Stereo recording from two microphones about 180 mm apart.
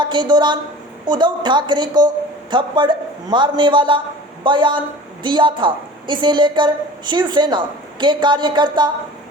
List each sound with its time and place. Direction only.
0.0 s a woman's voice: 25° right (ahead or behind)